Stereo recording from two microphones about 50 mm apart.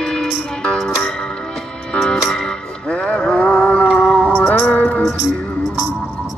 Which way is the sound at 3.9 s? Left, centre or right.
Centre.